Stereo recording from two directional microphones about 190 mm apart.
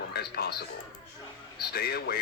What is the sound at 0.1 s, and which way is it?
Speech, 55° left (ahead or behind).